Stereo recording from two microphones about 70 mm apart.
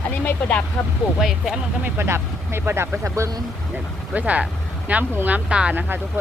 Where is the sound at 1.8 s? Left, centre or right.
Right.